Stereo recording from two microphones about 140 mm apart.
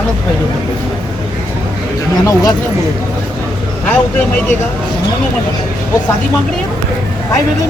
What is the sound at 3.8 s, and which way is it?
Speech, 10° left (ahead or behind).